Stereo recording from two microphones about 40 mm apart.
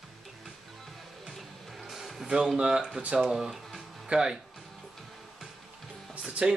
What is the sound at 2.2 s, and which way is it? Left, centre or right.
Speech, centre.